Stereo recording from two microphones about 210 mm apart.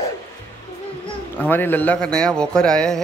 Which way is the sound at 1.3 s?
10° left (ahead or behind).